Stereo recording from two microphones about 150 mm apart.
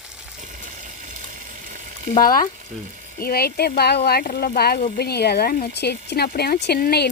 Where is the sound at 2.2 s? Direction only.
70° left (ahead or behind).